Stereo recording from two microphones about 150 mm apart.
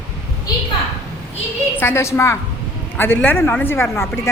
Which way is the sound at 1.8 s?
15° left (ahead or behind).